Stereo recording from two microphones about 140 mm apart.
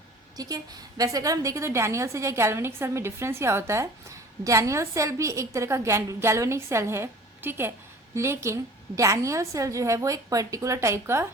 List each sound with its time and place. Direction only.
0.3 s a woman's voice: 25° right (ahead or behind)